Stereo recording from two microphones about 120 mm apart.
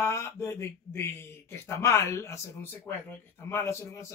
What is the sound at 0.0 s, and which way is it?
Speech, 20° left (ahead or behind).